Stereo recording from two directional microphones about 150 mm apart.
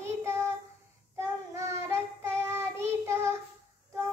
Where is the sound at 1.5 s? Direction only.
20° right (ahead or behind).